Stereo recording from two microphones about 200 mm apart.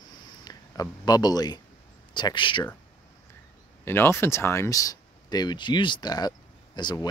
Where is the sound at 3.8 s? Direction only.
10° left (ahead or behind).